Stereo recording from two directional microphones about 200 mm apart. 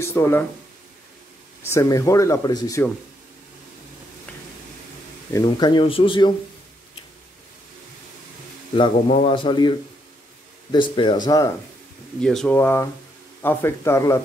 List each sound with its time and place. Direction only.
0.0 s speech: 10° left (ahead or behind)
1.6 s speech: 15° left (ahead or behind)
5.3 s a man's voice: 20° left (ahead or behind)
8.7 s a man's voice: 30° left (ahead or behind)
12.2 s speech: 5° left (ahead or behind)